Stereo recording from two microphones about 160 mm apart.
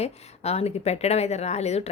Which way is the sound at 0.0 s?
40° left (ahead or behind).